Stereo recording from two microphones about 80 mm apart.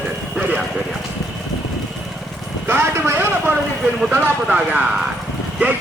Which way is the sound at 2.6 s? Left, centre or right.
Right.